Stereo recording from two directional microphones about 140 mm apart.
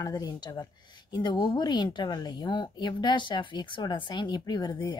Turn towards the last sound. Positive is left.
turn(degrees=30)  # may be behind; listen again after turning